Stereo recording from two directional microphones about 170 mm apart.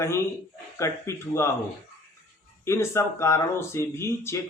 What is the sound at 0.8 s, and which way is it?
Speech, 15° left (ahead or behind).